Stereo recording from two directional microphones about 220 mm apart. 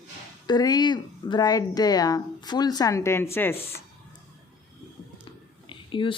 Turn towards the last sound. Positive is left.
turn(degrees=20)  # may be behind; listen again after turning